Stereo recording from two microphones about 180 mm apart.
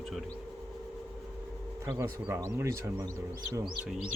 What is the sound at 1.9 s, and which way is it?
Speech, 15° right (ahead or behind).